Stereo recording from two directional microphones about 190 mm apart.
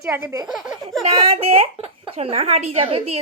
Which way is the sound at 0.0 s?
10° right (ahead or behind).